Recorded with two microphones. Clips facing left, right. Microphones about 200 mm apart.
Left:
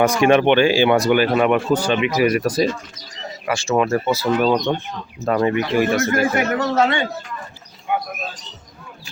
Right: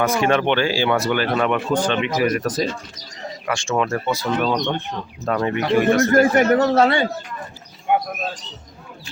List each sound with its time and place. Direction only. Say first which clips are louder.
0.2 s speech: left 5 dB; 15° left (ahead or behind)
6.0 s speech: right 4 dB; 40° right (ahead or behind)
7.9 s speech: right 3 dB; 60° right (ahead or behind)